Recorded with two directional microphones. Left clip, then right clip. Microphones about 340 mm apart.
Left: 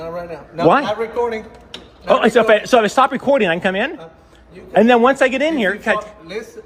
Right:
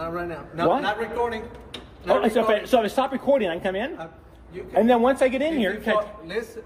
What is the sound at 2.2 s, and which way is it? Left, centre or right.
A man's voice, left.